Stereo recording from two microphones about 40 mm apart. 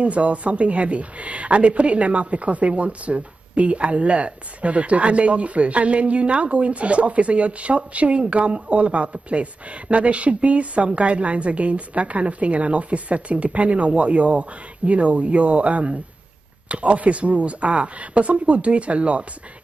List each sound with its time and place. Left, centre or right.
0.0 s speech: right